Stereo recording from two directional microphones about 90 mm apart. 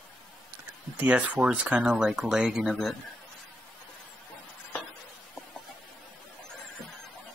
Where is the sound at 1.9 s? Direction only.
5° right (ahead or behind).